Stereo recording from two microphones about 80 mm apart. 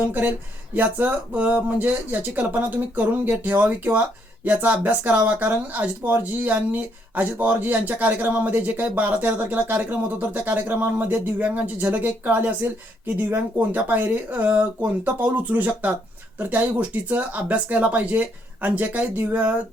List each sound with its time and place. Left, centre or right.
0.0 s speech: right